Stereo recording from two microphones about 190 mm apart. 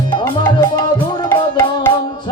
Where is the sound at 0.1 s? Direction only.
25° left (ahead or behind).